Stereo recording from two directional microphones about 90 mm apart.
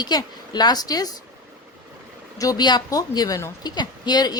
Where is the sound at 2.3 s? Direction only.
40° left (ahead or behind).